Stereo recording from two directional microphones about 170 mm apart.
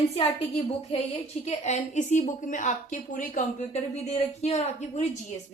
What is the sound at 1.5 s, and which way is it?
A woman's voice, 45° left (ahead or behind).